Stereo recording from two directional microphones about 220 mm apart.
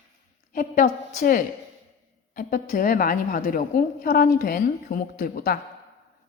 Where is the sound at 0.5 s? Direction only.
40° left (ahead or behind).